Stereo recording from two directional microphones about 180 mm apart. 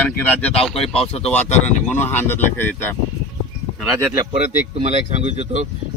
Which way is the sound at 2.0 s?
10° left (ahead or behind).